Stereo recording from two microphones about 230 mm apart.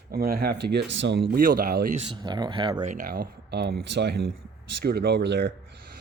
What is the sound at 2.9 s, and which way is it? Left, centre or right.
Speech, right.